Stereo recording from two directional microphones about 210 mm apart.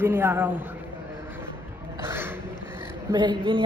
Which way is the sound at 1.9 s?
10° right (ahead or behind).